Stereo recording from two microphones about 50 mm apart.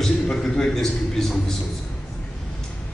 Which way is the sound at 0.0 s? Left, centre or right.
Centre.